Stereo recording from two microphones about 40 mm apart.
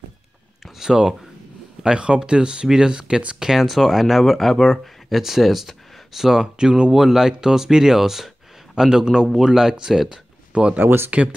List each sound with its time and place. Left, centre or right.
0.7 s speech: centre
3.5 s speech: centre
10.5 s speech: right